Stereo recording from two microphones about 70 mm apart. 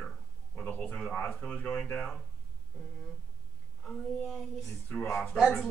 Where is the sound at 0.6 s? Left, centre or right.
Left.